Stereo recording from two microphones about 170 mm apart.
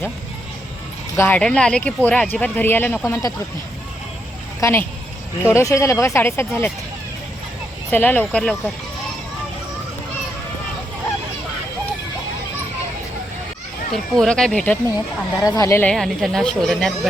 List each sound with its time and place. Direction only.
1.1 s speech: 15° left (ahead or behind)
4.6 s speech: 15° left (ahead or behind)
7.9 s speech: 10° left (ahead or behind)
13.9 s speech: centre (ahead or behind)
15.4 s speech: 20° left (ahead or behind)
16.0 s speech: centre (ahead or behind)